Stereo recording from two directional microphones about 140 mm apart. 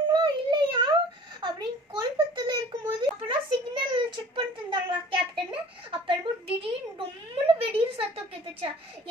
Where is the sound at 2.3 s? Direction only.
35° right (ahead or behind).